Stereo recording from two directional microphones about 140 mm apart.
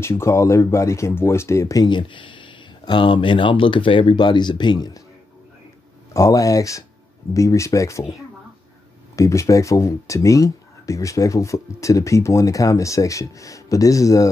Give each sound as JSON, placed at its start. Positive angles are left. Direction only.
{"t": 0.0, "sound": "speech", "side_deg": 20}
{"t": 6.1, "sound": "speech", "side_deg": 25}